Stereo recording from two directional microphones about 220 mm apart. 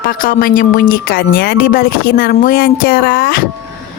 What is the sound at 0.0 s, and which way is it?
Speech, 40° left (ahead or behind).